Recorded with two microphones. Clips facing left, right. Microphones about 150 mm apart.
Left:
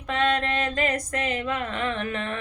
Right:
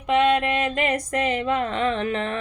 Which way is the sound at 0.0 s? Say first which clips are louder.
Right 5 dB; 20° right (ahead or behind).